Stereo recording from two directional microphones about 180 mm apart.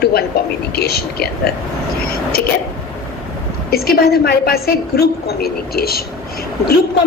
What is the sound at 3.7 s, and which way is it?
A woman's voice, 60° left (ahead or behind).